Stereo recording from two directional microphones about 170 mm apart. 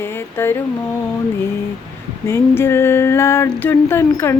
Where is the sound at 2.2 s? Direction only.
15° left (ahead or behind).